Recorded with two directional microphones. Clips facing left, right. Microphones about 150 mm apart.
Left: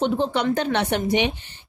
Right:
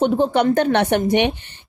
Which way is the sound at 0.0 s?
50° right (ahead or behind).